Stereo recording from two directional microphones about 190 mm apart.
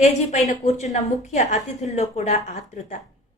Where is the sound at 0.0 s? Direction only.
35° left (ahead or behind).